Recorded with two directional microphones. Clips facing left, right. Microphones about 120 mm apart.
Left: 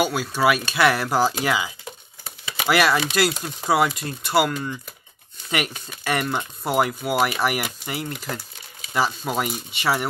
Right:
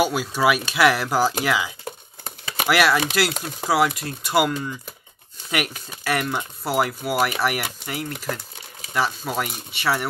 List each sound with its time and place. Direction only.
0.0 s speech: 15° right (ahead or behind)
2.2 s a sound: 50° right (ahead or behind)
2.6 s speech: 5° right (ahead or behind)